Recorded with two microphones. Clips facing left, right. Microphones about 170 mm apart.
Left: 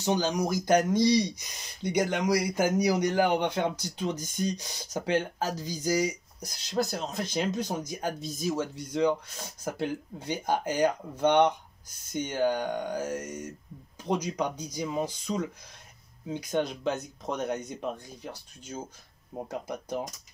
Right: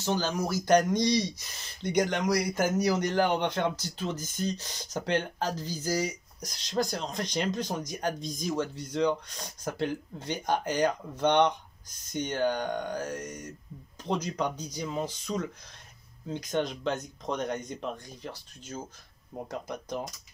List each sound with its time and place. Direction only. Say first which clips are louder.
0.0 s speech: left 2 dB; 15° left (ahead or behind)